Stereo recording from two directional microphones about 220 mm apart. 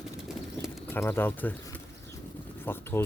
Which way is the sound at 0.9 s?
10° left (ahead or behind).